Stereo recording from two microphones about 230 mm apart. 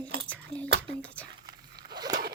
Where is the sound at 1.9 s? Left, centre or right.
Centre.